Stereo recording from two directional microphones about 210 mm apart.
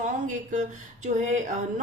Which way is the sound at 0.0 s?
35° right (ahead or behind).